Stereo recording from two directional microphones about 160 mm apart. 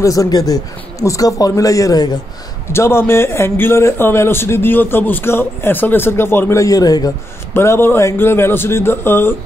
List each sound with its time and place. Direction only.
0.0 s a man's voice: 20° left (ahead or behind)